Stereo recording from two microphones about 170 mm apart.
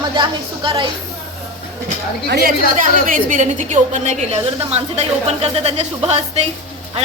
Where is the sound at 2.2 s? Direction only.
80° right.